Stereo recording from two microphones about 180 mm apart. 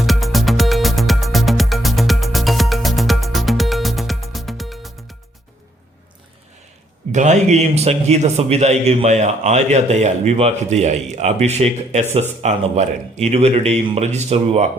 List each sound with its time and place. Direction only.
0.0 s music: centre (ahead or behind)
7.1 s a man's voice: 40° right (ahead or behind)